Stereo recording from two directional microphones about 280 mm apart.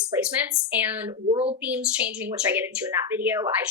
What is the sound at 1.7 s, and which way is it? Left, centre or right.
A woman's voice, centre.